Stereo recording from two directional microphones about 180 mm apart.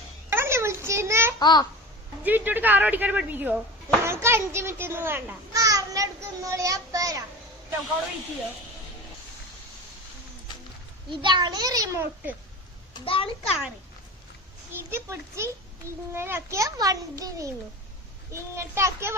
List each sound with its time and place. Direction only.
0.3 s a sound: 15° right (ahead or behind)
1.4 s a child's voice: 25° left (ahead or behind)
2.2 s a child's voice: 10° right (ahead or behind)
11.1 s a child's voice: 25° right (ahead or behind)
12.9 s a child's voice: 30° left (ahead or behind)
14.7 s a child's voice: 10° right (ahead or behind)